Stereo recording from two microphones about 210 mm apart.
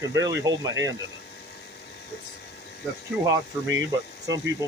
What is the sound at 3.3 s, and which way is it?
Speech, 15° right (ahead or behind).